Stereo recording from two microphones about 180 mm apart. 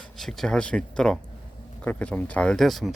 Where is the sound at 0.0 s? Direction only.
Centre (ahead or behind).